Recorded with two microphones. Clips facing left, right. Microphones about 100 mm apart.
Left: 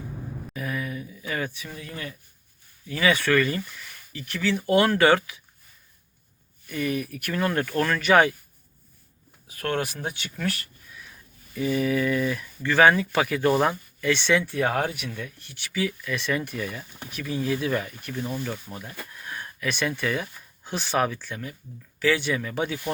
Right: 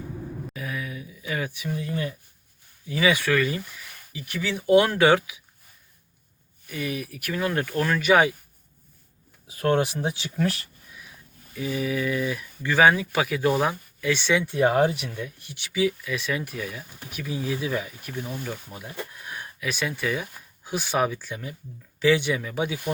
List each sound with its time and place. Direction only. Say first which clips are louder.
0.5 s a sound: left 5 dB; centre (ahead or behind); by 2.1 s 20° right (ahead or behind)
2.9 s speech: even; 10° right (ahead or behind)
6.7 s speech: left 3 dB; 5° right (ahead or behind)
9.5 s speech: right 5 dB; 30° right (ahead or behind)
11.5 s speech: left 3 dB; 5° right (ahead or behind)
14.4 s speech: right 5 dB; 20° right (ahead or behind)
18.9 s a sound: right 1 dB; 20° right (ahead or behind)
20.7 s speech: even; 10° right (ahead or behind)